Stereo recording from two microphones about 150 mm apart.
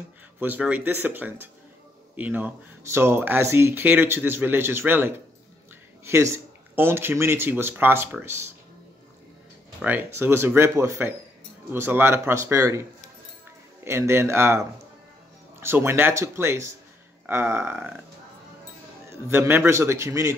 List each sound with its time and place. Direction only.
0.4 s speech: 10° right (ahead or behind)
9.8 s speech: 10° right (ahead or behind)
13.8 s speech: 15° right (ahead or behind)
19.0 s speech: 15° right (ahead or behind)